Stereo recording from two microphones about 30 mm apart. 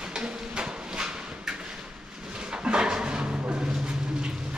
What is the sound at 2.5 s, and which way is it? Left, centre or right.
Dog, right.